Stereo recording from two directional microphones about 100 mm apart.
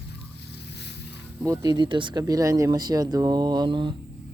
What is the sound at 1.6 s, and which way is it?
Speech, 50° right (ahead or behind).